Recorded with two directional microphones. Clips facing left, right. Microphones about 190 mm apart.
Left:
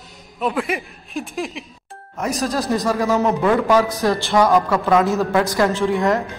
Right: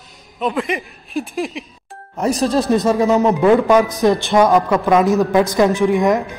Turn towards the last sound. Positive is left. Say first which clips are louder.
# right 3 dB
turn(degrees=-15)  # may be behind; listen again after turning